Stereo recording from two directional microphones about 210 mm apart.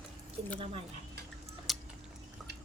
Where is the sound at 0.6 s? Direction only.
25° right (ahead or behind).